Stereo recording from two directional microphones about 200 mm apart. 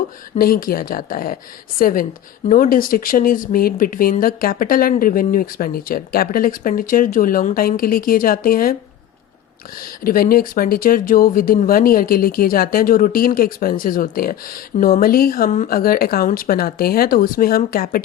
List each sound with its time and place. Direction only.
0.3 s speech: 45° left (ahead or behind)
10.0 s speech: 45° left (ahead or behind)